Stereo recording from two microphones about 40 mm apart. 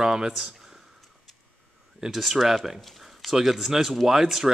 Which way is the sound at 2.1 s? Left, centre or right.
Centre.